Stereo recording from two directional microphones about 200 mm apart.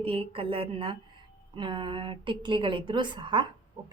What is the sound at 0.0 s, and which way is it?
A woman's voice, 25° right (ahead or behind).